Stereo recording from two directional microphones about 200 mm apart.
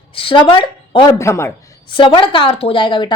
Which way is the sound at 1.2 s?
15° left (ahead or behind).